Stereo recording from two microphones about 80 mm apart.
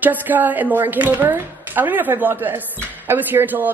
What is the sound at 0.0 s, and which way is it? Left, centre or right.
A woman's voice, right.